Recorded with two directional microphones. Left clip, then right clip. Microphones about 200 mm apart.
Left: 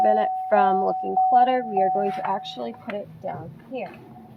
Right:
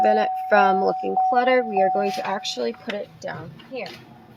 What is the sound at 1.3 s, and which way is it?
Speech, 55° right (ahead or behind).